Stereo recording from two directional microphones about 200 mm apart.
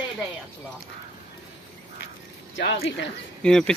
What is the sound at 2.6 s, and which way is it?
Speech, 60° left (ahead or behind).